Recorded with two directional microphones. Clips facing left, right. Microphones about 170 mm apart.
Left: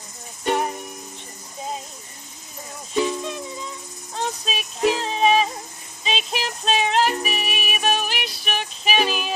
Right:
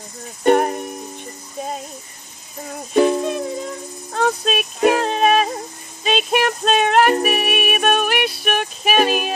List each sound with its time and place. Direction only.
0.4 s music: 55° right (ahead or behind)
2.9 s music: 55° right (ahead or behind)